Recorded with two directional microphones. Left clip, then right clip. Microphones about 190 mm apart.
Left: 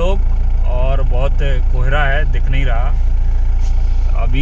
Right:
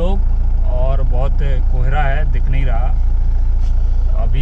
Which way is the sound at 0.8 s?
20° left (ahead or behind).